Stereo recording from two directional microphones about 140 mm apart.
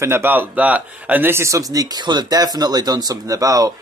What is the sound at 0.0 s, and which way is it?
Speech, 15° right (ahead or behind).